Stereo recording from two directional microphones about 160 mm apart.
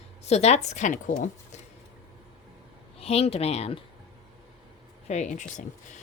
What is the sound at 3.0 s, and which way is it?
Speech, 40° left (ahead or behind).